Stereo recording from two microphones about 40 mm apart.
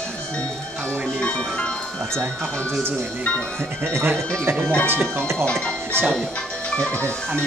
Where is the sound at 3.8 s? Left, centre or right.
Right.